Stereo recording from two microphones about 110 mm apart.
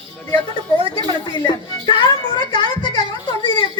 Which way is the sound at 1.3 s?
45° left (ahead or behind).